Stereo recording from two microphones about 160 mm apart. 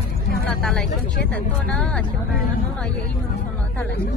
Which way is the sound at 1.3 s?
5° left (ahead or behind).